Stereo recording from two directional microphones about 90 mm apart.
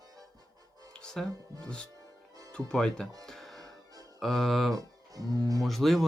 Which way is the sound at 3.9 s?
45° right (ahead or behind).